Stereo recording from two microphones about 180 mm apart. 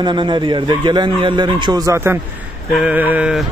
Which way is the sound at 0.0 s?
25° right (ahead or behind).